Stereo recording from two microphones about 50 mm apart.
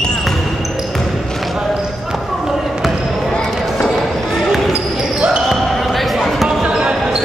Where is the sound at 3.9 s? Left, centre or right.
Centre.